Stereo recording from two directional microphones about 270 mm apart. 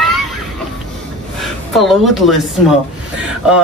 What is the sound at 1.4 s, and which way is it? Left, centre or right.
A woman's voice, centre.